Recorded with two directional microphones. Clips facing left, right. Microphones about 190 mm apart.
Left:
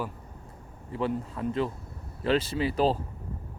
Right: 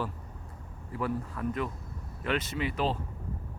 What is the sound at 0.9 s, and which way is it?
Speech, 25° left (ahead or behind).